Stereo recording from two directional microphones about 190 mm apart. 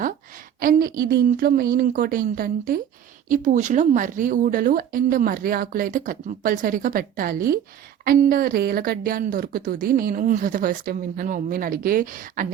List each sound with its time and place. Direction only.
0.6 s a woman's voice: 50° right (ahead or behind)